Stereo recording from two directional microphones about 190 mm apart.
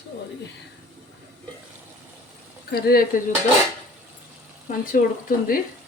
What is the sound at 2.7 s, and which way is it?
Speech, 55° left (ahead or behind).